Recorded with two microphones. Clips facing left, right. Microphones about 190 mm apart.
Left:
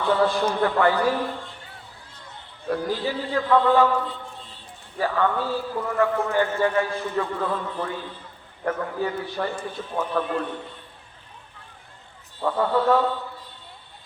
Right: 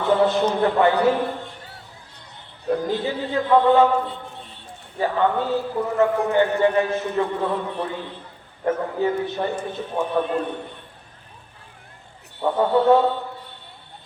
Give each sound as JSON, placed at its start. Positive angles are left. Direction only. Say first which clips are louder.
{"t": 0.0, "sound": "a man's voice", "louder": "right 3 dB", "side_deg": -20}
{"t": 2.6, "sound": "a man's voice", "louder": "right 3 dB", "side_deg": -20}
{"t": 12.4, "sound": "a man's voice", "louder": "right 3 dB", "side_deg": -25}